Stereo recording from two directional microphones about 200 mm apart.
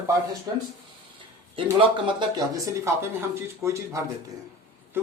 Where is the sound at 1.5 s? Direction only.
25° right (ahead or behind).